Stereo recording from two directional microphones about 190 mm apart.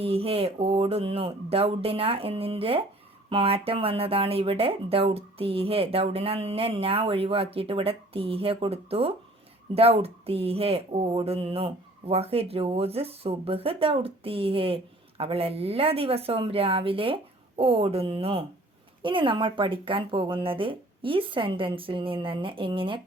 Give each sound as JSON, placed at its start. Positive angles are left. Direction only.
{"t": 0.0, "sound": "speech", "side_deg": -30}